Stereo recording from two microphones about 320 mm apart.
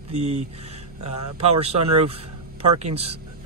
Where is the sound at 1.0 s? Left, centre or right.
Right.